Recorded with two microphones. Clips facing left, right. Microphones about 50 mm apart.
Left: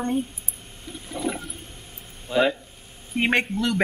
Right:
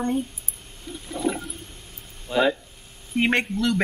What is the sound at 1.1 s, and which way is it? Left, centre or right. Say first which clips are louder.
Toilet flush: right 2 dB; centre.